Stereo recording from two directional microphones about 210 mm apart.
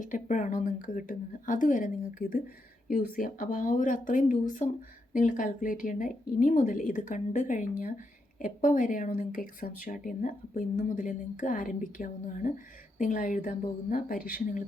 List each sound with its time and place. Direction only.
0.0 s speech: 35° left (ahead or behind)